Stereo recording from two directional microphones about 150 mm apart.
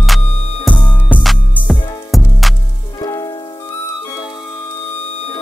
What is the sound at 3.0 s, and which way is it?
Music, 25° left (ahead or behind).